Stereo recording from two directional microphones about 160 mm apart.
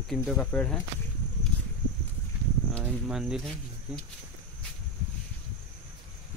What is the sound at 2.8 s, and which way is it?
Speech, 5° right (ahead or behind).